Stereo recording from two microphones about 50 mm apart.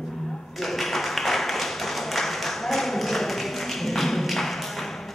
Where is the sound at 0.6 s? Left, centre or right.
Centre.